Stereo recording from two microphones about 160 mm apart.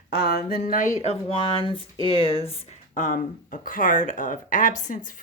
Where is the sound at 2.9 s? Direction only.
55° left (ahead or behind).